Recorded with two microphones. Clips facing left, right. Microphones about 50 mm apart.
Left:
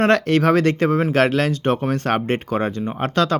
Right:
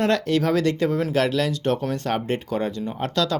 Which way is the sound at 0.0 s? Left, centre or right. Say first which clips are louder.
Left 5 dB; left.